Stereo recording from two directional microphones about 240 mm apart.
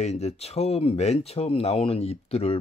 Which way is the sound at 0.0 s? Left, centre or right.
Left.